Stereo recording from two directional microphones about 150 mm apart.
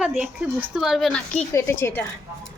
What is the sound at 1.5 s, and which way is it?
Speech, 20° left (ahead or behind).